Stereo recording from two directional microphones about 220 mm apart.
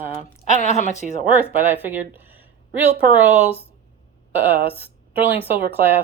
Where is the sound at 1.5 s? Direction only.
10° right (ahead or behind).